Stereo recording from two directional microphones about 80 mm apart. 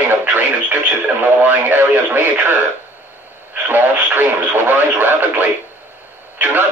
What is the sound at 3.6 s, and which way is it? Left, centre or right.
Speech, right.